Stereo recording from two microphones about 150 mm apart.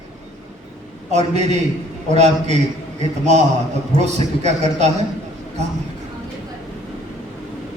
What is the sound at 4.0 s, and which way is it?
Speech, 50° right (ahead or behind).